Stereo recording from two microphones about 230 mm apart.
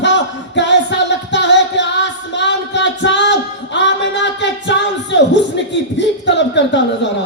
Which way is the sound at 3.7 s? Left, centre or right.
Left.